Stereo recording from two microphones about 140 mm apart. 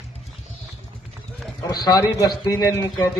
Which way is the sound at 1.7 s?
30° left (ahead or behind).